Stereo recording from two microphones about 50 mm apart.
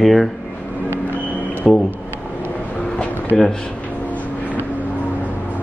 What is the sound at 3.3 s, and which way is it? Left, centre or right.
Speech, centre.